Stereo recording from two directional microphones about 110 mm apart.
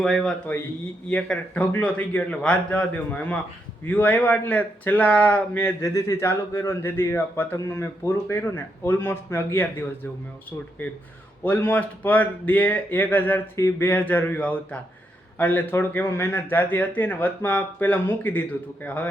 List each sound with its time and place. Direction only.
0.0 s a man's voice: 5° left (ahead or behind); by 9.8 s 20° left (ahead or behind)
11.4 s a man's voice: 15° left (ahead or behind)